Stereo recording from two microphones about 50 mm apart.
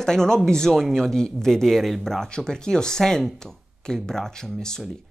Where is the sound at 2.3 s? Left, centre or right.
Centre.